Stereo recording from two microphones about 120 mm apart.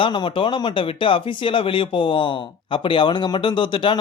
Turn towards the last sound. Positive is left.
turn(degrees=40)  # may be behind; listen again after turning